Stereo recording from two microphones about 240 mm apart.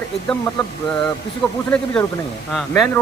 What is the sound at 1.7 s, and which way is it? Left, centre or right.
A man's voice, centre.